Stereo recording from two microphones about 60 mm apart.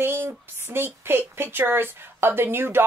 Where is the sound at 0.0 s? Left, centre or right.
Right.